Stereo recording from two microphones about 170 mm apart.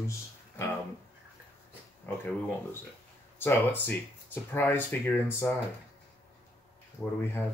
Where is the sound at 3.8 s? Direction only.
10° left (ahead or behind).